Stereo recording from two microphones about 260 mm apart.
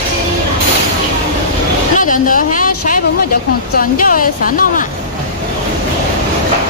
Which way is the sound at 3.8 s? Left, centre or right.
Left.